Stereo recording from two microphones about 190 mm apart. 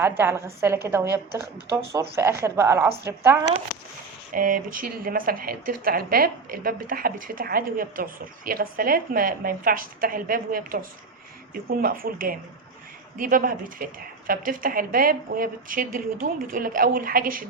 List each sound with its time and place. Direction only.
0.2 s speech: 15° right (ahead or behind)
1.9 s speech: 15° right (ahead or behind)
4.3 s speech: 45° right (ahead or behind)